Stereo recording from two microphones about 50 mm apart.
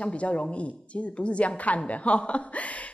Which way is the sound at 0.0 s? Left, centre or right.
Left.